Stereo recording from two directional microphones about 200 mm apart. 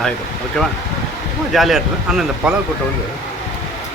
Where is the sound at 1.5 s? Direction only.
Centre (ahead or behind).